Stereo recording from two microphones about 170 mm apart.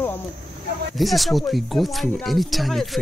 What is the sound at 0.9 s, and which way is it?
Speech, centre (ahead or behind).